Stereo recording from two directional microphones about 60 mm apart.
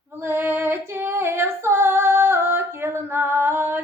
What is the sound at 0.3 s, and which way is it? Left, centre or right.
Female singing, right.